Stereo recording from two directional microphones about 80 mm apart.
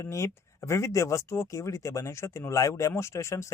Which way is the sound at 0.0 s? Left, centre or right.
Left.